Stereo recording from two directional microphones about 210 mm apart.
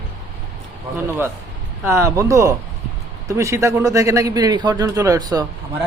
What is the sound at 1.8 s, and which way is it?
A man's voice, 15° right (ahead or behind).